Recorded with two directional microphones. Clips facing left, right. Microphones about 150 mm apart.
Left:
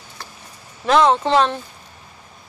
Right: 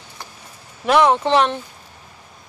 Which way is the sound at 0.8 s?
15° right (ahead or behind).